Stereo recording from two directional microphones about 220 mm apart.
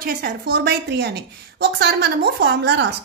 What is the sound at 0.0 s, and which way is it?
A child's voice, 45° right (ahead or behind).